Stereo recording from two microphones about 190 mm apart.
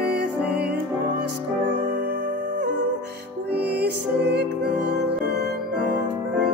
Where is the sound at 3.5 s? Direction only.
60° right (ahead or behind).